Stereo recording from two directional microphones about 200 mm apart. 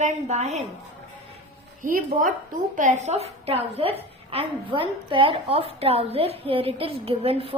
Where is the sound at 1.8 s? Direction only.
45° right (ahead or behind).